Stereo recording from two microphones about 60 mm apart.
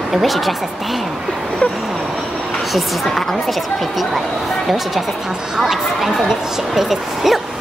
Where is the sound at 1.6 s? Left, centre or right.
Centre.